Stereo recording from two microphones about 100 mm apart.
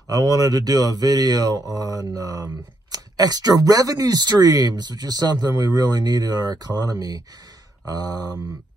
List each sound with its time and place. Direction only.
0.1 s mantra: 35° right (ahead or behind)